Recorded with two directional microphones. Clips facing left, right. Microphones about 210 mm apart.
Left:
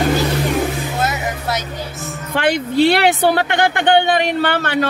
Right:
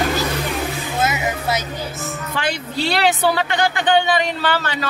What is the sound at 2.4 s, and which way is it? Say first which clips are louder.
Speech: left 10 dB; 60° left (ahead or behind).